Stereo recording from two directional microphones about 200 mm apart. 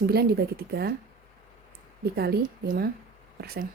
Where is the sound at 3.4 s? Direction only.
50° right (ahead or behind).